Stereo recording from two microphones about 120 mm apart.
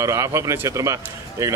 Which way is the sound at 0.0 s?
25° right (ahead or behind).